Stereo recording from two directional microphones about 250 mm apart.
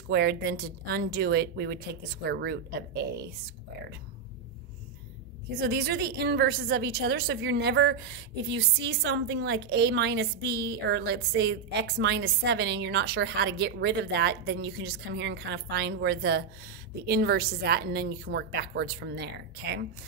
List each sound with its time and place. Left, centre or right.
0.1 s a woman's voice: right
5.6 s a woman's voice: right